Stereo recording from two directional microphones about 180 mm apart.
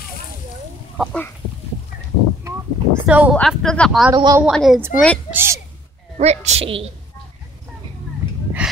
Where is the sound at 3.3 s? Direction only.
5° left (ahead or behind).